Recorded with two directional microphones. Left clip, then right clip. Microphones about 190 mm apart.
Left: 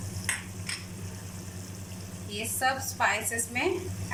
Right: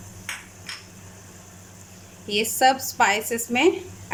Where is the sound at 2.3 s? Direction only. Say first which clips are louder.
Right 10 dB; 55° right (ahead or behind).